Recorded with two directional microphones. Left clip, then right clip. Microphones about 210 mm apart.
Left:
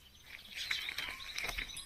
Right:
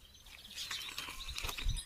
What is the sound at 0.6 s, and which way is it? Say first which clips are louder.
Patter: left 5 dB; 35° right (ahead or behind).